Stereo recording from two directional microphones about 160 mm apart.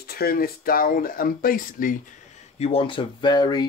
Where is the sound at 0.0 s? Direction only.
75° left (ahead or behind).